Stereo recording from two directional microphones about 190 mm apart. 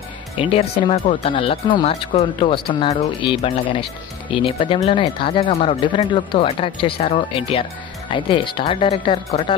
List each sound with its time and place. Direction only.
0.4 s speech: 30° left (ahead or behind)